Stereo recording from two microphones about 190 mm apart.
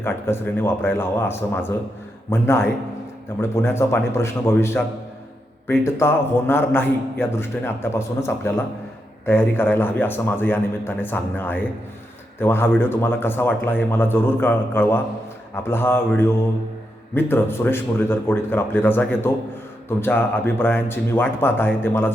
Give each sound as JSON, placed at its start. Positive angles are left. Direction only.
{"t": 0.0, "sound": "a man's voice", "side_deg": 10}